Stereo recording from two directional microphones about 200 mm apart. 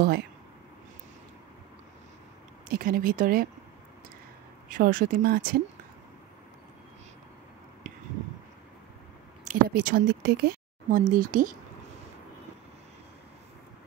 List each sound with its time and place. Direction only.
2.7 s speech: 45° right (ahead or behind)
4.6 s speech: 45° right (ahead or behind)
7.8 s a sound: 40° right (ahead or behind)
9.4 s speech: 40° right (ahead or behind)